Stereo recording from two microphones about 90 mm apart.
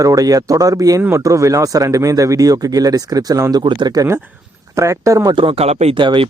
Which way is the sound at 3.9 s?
35° right (ahead or behind).